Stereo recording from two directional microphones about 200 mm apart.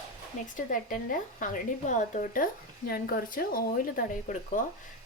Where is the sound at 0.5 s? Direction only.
40° left (ahead or behind).